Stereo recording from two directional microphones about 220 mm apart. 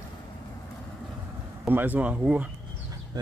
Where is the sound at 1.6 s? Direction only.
10° right (ahead or behind).